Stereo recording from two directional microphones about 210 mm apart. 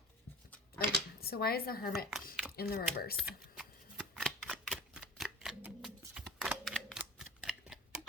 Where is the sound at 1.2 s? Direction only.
45° left (ahead or behind).